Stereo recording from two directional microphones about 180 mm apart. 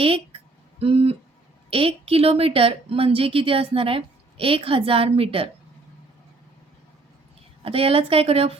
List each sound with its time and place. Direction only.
0.0 s a sound: 30° right (ahead or behind)
1.7 s a woman's voice: 30° right (ahead or behind)
7.6 s a woman's voice: 30° right (ahead or behind)